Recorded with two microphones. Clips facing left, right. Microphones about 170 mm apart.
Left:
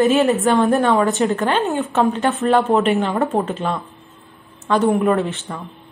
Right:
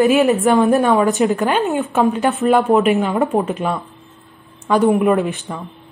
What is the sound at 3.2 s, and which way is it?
A woman's voice, 10° right (ahead or behind).